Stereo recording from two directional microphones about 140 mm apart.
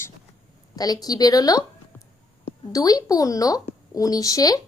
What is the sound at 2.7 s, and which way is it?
A woman's voice, 25° left (ahead or behind).